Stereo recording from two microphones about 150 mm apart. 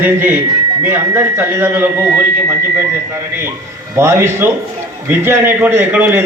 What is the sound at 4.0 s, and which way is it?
A man's voice, 15° right (ahead or behind).